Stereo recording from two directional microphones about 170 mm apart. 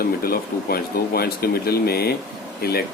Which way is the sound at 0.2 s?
60° left (ahead or behind).